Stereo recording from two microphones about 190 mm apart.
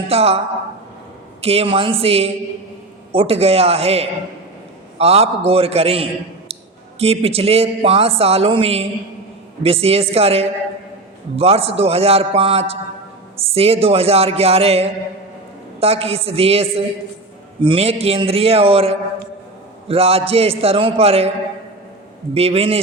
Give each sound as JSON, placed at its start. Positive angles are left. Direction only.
{"t": 0.1, "sound": "a man's voice", "side_deg": -30}
{"t": 22.4, "sound": "a man's voice", "side_deg": -30}